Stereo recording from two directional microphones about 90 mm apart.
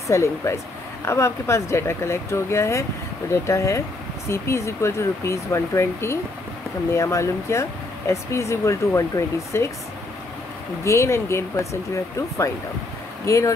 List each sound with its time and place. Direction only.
0.1 s speech: 35° left (ahead or behind)
10.8 s speech: 30° left (ahead or behind)